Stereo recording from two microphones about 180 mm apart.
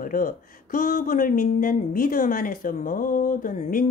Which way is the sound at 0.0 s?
50° left (ahead or behind).